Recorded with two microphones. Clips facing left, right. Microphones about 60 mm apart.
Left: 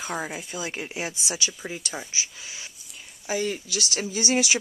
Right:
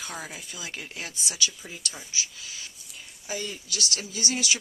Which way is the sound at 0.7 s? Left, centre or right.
Centre.